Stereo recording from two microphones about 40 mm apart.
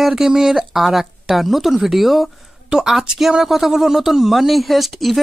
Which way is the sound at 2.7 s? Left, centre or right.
Centre.